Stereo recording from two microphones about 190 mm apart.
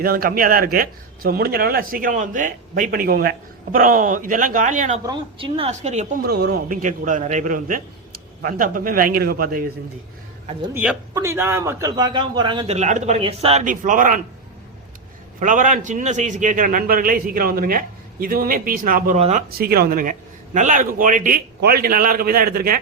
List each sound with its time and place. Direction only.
0.0 s speech: 50° right (ahead or behind)
5.0 s a woman's voice: 25° right (ahead or behind)
6.2 s speech: 55° right (ahead or behind)
10.8 s a man's voice: 10° right (ahead or behind); by 14.2 s 45° right (ahead or behind)
15.4 s speech: 40° right (ahead or behind)